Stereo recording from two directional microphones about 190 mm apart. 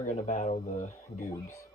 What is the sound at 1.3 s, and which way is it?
Speech, 15° left (ahead or behind).